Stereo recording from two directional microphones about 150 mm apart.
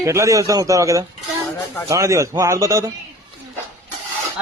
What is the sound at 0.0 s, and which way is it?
A man's voice, 20° right (ahead or behind).